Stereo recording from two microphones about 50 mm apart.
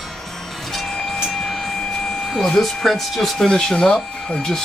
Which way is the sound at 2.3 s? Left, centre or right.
Centre.